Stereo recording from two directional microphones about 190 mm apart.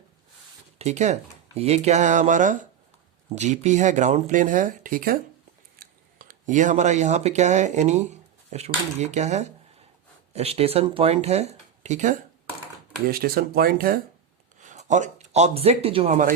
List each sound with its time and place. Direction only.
0.8 s speech: 35° right (ahead or behind)
13.1 s speech: 50° right (ahead or behind)
14.6 s speech: 40° right (ahead or behind)